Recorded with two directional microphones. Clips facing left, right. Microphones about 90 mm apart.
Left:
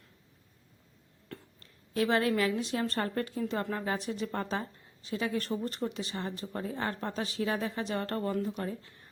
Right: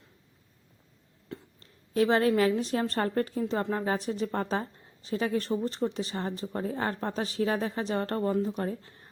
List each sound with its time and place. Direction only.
1.5 s a woman's voice: 35° right (ahead or behind)